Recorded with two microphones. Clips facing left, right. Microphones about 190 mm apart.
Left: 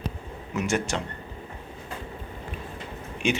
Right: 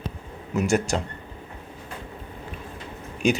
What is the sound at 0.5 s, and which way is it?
Speech, 40° right (ahead or behind).